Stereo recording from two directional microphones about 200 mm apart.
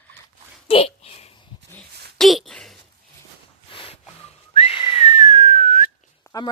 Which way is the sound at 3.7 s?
25° left (ahead or behind).